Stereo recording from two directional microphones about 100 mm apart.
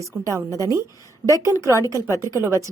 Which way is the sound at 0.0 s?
30° right (ahead or behind).